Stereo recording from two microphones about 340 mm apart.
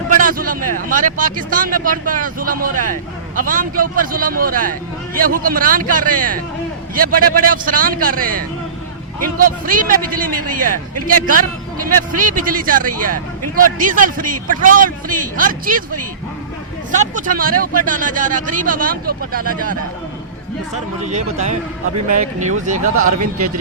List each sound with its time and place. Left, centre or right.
0.1 s a sound: right
0.8 s speech: right
16.9 s speech: right
21.0 s speech: right